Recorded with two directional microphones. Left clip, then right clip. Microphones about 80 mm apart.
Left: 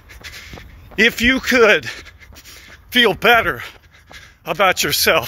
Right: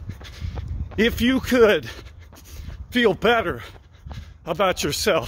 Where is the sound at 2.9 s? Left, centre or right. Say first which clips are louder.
Left 6 dB; right.